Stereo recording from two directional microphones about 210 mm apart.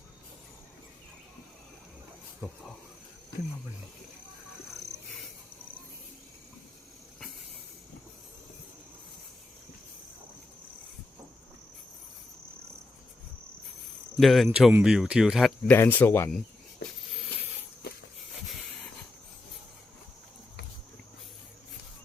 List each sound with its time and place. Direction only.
14.2 s speech: centre (ahead or behind)
15.7 s speech: 10° left (ahead or behind)
17.8 s walk: 50° left (ahead or behind)